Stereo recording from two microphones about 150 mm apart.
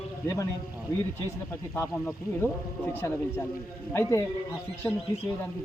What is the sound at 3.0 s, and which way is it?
Speech, 15° left (ahead or behind).